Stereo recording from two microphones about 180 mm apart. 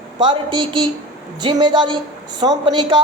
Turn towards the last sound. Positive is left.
turn(degrees=-25)  # may be behind; listen again after turning